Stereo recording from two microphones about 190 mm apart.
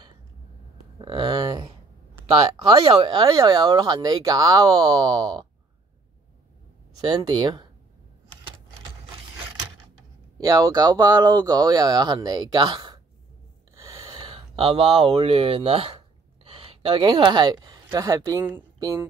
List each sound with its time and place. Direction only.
0.9 s speech: 25° right (ahead or behind)
7.0 s speech: 20° right (ahead or behind)
10.3 s speech: 20° right (ahead or behind)